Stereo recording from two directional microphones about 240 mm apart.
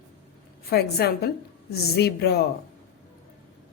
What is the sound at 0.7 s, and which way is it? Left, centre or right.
Speech, left.